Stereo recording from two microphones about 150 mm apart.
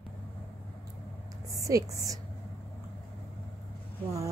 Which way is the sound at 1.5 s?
20° right (ahead or behind).